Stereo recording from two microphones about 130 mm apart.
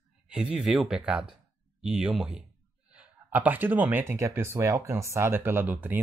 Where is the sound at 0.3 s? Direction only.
5° right (ahead or behind).